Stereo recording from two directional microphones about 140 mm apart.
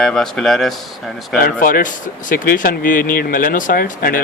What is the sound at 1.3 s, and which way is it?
Speech, 85° left.